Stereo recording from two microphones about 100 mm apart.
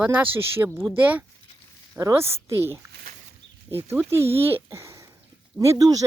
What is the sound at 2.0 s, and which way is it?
Speech, 30° right (ahead or behind).